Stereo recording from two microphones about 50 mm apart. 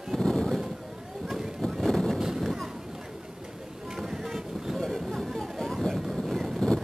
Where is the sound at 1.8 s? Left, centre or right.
Centre.